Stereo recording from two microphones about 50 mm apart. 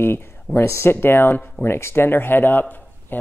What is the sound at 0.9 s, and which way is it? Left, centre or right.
Speech, left.